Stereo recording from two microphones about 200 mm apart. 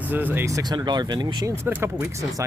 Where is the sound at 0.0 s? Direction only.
10° right (ahead or behind).